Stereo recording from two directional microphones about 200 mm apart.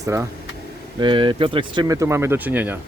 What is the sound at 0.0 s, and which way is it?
Speech, 15° right (ahead or behind).